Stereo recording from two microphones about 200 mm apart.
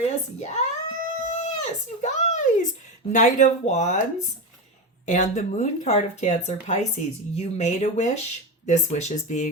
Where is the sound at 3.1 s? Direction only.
40° left (ahead or behind).